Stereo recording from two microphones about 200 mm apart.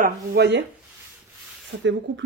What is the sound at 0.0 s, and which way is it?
Speech, 55° right (ahead or behind).